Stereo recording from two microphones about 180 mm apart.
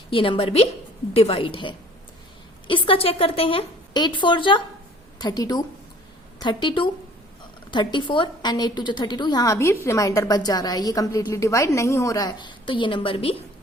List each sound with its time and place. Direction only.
0.1 s a woman's voice: 30° left (ahead or behind)